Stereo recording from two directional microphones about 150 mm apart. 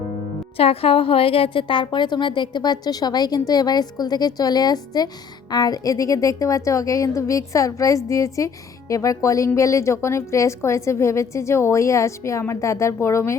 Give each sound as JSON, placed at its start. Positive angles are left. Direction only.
{"t": 0.5, "sound": "a woman's voice", "side_deg": 40}